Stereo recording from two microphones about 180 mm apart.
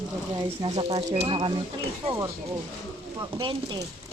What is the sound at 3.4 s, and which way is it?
Speech, 25° right (ahead or behind).